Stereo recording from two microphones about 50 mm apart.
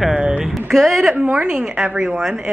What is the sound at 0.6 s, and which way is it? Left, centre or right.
Speech, centre.